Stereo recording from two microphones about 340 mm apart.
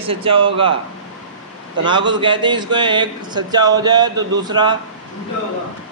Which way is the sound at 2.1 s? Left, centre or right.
Centre.